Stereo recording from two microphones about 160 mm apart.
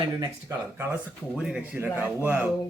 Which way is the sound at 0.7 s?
15° right (ahead or behind).